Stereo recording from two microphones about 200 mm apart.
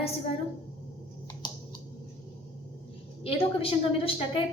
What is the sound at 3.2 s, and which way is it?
Speech, 30° left (ahead or behind).